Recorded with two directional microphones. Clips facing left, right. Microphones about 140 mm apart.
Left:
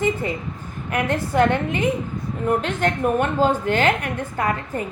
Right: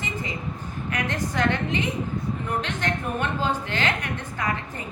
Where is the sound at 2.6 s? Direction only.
45° left (ahead or behind).